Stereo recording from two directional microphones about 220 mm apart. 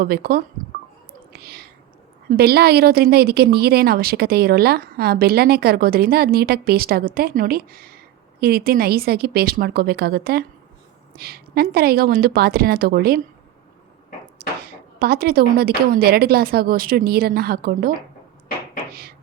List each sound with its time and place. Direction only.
0.0 s a woman's voice: 45° right (ahead or behind)
1.3 s whispering: 45° right (ahead or behind)
2.3 s a woman's voice: 45° right (ahead or behind)
14.7 s a woman's voice: 45° right (ahead or behind)
18.9 s a sound: 45° right (ahead or behind)